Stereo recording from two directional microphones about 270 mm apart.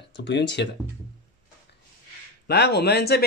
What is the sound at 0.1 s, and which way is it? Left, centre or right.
Speech, left.